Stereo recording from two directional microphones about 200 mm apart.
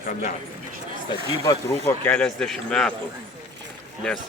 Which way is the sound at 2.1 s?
5° left (ahead or behind).